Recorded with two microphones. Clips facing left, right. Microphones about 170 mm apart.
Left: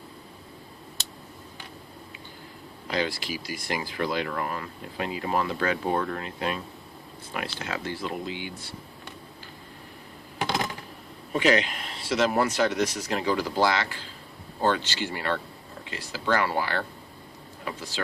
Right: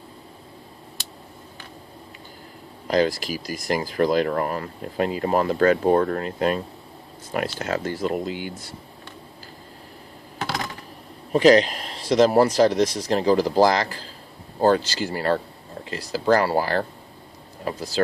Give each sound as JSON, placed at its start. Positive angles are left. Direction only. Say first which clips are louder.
{"t": 2.8, "sound": "a man's voice", "louder": "right 8 dB", "side_deg": -40}
{"t": 11.3, "sound": "a man's voice", "louder": "right 8 dB", "side_deg": -35}